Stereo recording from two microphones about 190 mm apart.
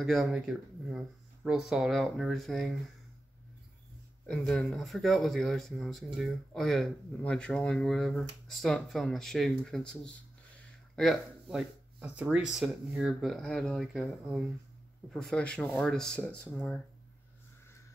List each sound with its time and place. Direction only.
0.0 s speech: centre (ahead or behind)
4.3 s speech: 5° left (ahead or behind)